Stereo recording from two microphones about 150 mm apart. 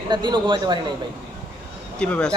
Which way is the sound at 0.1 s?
30° right (ahead or behind).